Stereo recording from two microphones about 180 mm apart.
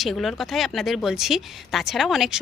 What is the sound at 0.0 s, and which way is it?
A woman's voice, centre (ahead or behind).